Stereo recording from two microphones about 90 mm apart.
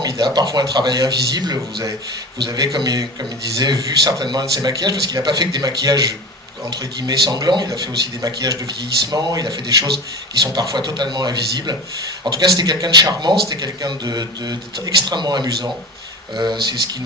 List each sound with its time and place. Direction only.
0.0 s a man's voice: 50° right (ahead or behind)